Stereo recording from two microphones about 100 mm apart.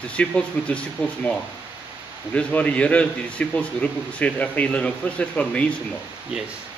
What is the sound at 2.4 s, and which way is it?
A man's voice, 10° left (ahead or behind).